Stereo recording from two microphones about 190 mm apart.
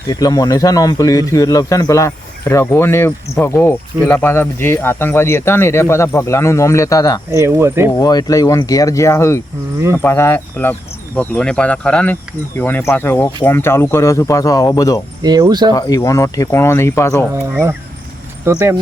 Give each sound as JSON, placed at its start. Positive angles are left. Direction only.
{"t": 0.1, "sound": "speech", "side_deg": 20}
{"t": 7.3, "sound": "speech", "side_deg": -15}
{"t": 7.9, "sound": "speech", "side_deg": 20}
{"t": 15.2, "sound": "speech", "side_deg": -20}
{"t": 15.7, "sound": "speech", "side_deg": 20}
{"t": 17.5, "sound": "speech", "side_deg": -10}